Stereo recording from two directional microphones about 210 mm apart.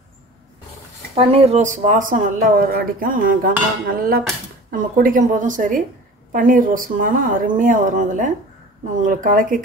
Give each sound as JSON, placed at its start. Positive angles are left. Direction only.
{"t": 1.1, "sound": "speech", "side_deg": -30}